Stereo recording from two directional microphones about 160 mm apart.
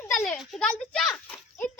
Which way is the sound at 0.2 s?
Centre (ahead or behind).